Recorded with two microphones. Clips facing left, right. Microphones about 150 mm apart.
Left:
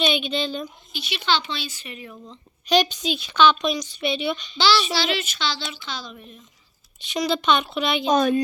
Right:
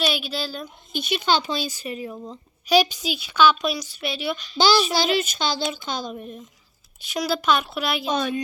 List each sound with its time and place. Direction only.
0.0 s a woman's voice: 5° right (ahead or behind)
0.9 s speech: 45° right (ahead or behind)
2.6 s a woman's voice: 5° right (ahead or behind)
4.5 s a child's voice: 45° right (ahead or behind)
7.0 s a woman's voice: 5° right (ahead or behind)
8.0 s speech: 45° left (ahead or behind)